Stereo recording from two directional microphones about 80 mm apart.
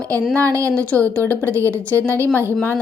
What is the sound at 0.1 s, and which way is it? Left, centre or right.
A woman's voice, centre.